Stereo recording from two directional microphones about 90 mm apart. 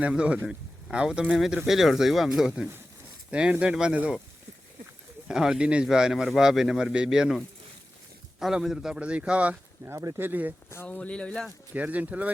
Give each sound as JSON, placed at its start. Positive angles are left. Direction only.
{"t": 0.0, "sound": "speech", "side_deg": -10}
{"t": 5.3, "sound": "speech", "side_deg": -5}
{"t": 8.4, "sound": "speech", "side_deg": -5}
{"t": 9.8, "sound": "speech", "side_deg": -30}
{"t": 10.8, "sound": "speech", "side_deg": 10}
{"t": 11.7, "sound": "speech", "side_deg": -15}